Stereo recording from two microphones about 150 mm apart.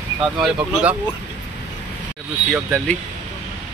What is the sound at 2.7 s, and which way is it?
Speech, 5° left (ahead or behind).